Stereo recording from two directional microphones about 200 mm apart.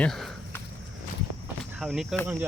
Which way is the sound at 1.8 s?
Centre (ahead or behind).